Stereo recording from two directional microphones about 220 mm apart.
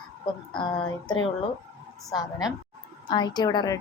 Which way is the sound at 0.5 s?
20° left (ahead or behind).